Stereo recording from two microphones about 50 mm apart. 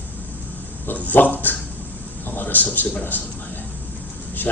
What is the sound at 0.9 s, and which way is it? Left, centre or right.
A man's voice, left.